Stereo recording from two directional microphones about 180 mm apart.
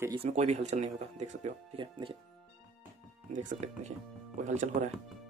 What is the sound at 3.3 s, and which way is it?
Speech, 40° right (ahead or behind).